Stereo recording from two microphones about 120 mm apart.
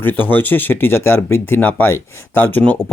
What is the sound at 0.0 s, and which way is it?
Speech, 15° left (ahead or behind).